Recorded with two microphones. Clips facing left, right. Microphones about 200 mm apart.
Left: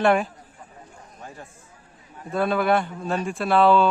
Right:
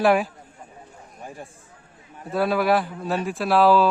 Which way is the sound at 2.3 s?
5° right (ahead or behind).